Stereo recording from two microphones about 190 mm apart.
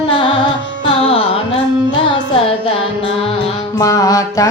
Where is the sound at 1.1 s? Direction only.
30° left (ahead or behind).